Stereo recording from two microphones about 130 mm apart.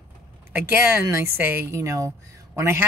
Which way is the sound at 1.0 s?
20° right (ahead or behind).